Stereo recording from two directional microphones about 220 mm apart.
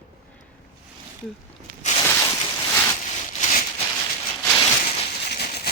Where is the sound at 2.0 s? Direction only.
15° left (ahead or behind).